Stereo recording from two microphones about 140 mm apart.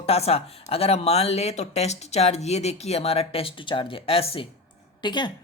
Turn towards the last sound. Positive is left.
turn(degrees=30)  # may be behind; listen again after turning